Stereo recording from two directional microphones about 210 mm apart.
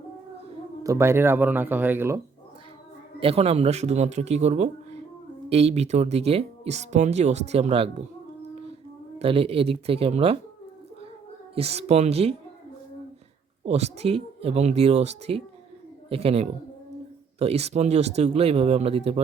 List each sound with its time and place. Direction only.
0.8 s speech: 15° right (ahead or behind)
3.2 s speech: 25° right (ahead or behind)
11.5 s speech: 30° right (ahead or behind)
13.7 s speech: 30° right (ahead or behind)